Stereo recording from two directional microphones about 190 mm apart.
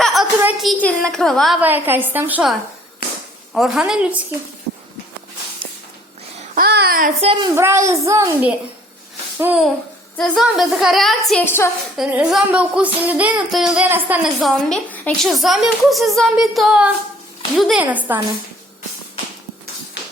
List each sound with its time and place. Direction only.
0.0 s a woman's voice: centre (ahead or behind)
1.6 s a child's voice: 10° right (ahead or behind)
6.5 s a child's voice: 55° right (ahead or behind)
7.2 s a woman's voice: 30° right (ahead or behind)
7.5 s a child's voice: 15° right (ahead or behind)
11.3 s a woman's voice: 10° left (ahead or behind)
11.9 s a child's voice: 5° right (ahead or behind)
14.7 s a child's voice: 10° left (ahead or behind); by 18.2 s 10° right (ahead or behind)